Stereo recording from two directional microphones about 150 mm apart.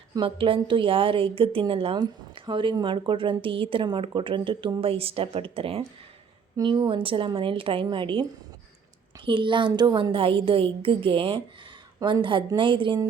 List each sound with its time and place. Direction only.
0.3 s a woman's voice: 35° right (ahead or behind)